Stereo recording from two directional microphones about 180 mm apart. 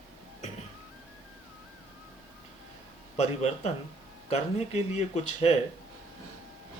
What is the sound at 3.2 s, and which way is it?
Speech, 35° left (ahead or behind).